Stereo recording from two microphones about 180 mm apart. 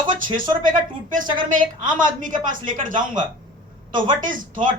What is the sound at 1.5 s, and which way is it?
A woman's voice, 50° right (ahead or behind).